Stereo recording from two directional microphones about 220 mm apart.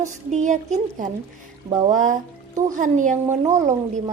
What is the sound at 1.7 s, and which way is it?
Speech, 20° right (ahead or behind).